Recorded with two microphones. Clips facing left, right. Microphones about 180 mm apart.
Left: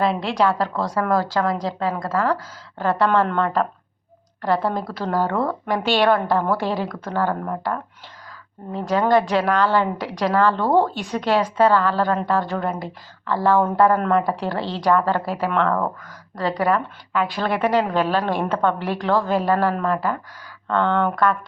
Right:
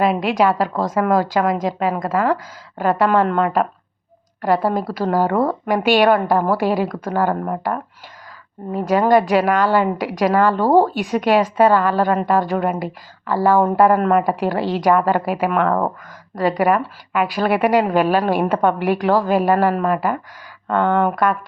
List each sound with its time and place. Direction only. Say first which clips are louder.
0.0 s a woman's voice: right 3 dB; 15° right (ahead or behind)